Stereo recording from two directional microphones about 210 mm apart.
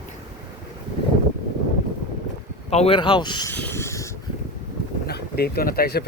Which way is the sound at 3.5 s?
10° left (ahead or behind).